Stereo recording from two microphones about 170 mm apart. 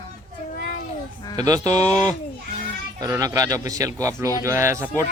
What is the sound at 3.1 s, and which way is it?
Speech, 20° right (ahead or behind).